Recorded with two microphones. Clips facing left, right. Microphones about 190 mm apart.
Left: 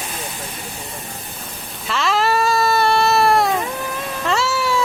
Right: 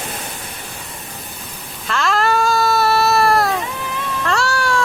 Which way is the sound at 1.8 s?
Centre (ahead or behind).